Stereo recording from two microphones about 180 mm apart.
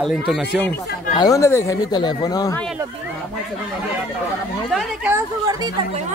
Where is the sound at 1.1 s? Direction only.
20° left (ahead or behind).